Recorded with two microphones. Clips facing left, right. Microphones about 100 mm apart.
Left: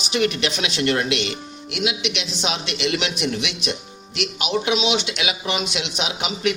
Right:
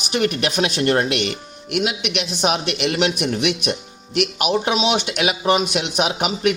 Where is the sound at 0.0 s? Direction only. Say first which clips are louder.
Right 1 dB; 50° right (ahead or behind).